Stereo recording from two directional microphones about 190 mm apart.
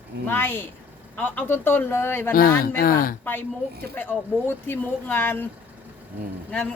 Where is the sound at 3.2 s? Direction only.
10° left (ahead or behind).